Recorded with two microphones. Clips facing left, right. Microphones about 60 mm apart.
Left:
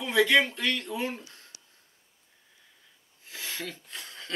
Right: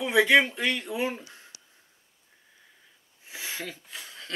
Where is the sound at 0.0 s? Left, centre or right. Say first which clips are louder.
Right 2 dB; centre.